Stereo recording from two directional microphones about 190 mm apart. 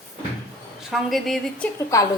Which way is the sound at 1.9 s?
15° left (ahead or behind).